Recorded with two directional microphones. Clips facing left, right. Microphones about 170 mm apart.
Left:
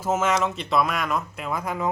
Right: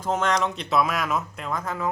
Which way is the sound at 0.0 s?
5° left (ahead or behind).